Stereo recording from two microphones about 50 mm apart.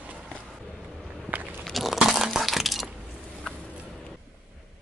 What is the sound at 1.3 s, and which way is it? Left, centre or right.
Biting, right.